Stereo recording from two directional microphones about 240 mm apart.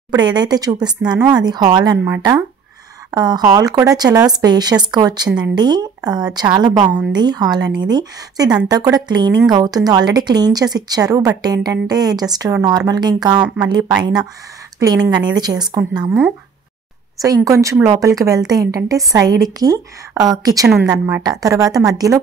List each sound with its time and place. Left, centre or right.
0.1 s speech: centre
15.0 s speech: centre